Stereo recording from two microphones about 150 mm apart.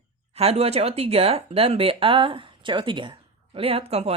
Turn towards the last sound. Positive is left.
turn(degrees=-45)  # may be behind; listen again after turning